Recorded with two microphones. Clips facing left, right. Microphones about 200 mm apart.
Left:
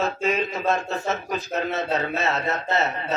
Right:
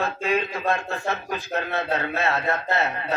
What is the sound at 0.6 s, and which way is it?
A man's voice, 20° left (ahead or behind).